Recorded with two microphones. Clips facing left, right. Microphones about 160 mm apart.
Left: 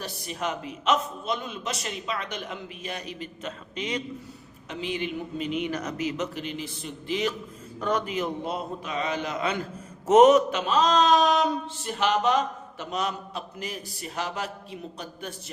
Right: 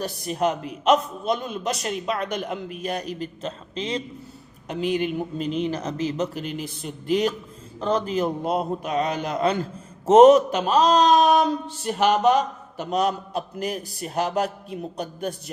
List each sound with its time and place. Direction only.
0.0 s a man's voice: 45° right (ahead or behind)
4.7 s speech: 50° right (ahead or behind)
7.8 s a man's voice: 30° right (ahead or behind)
8.5 s speech: 50° right (ahead or behind)
9.2 s a man's voice: 40° right (ahead or behind)